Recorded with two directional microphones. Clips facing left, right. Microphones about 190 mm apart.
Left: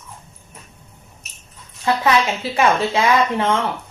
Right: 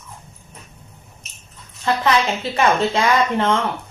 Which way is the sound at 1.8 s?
5° left (ahead or behind).